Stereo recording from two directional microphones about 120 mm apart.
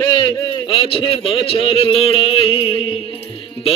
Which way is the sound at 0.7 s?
50° left (ahead or behind).